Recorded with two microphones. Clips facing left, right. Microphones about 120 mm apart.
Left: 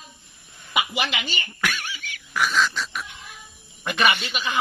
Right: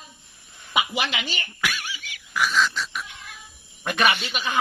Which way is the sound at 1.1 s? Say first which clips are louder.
Left 1 dB; centre (ahead or behind).